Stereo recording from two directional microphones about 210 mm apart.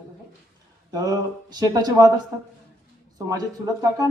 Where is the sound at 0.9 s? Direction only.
15° right (ahead or behind).